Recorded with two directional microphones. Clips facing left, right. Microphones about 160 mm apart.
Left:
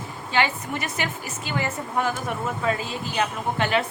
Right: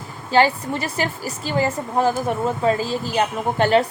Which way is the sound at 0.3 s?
35° right (ahead or behind).